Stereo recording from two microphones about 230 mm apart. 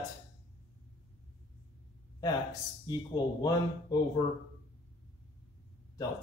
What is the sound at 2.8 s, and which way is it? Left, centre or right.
Speech, centre.